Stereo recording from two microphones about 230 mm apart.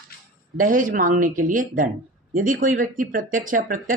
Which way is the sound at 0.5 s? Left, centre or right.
Right.